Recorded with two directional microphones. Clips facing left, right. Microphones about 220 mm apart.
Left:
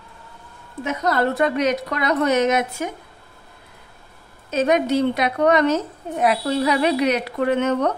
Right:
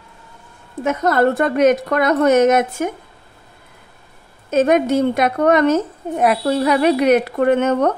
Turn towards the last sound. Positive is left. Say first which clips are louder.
# right 4 dB
turn(degrees=-50)  # may be behind; listen again after turning